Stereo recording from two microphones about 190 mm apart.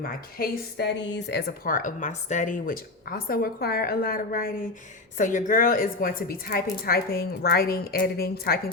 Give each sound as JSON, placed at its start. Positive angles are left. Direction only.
{"t": 0.3, "sound": "a woman's voice", "side_deg": 55}